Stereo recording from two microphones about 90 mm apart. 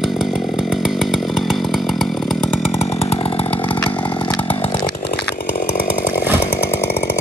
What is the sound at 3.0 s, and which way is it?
Chainsaw, 90° left.